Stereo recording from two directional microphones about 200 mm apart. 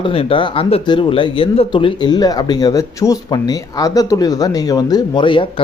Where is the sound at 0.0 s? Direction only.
25° left (ahead or behind).